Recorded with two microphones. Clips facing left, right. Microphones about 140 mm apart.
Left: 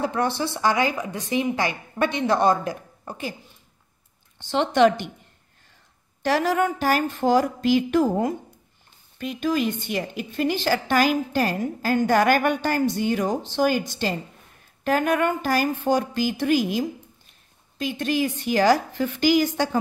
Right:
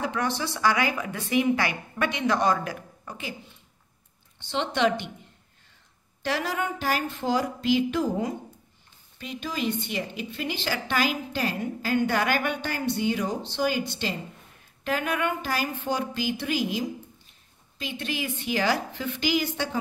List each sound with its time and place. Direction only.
0.0 s a woman's voice: 35° left (ahead or behind)
4.4 s a woman's voice: 45° left (ahead or behind)
6.2 s a woman's voice: 45° left (ahead or behind)